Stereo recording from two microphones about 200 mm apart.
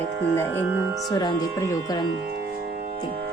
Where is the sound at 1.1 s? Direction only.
15° left (ahead or behind).